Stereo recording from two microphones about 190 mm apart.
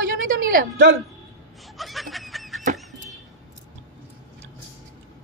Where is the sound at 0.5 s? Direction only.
50° right (ahead or behind).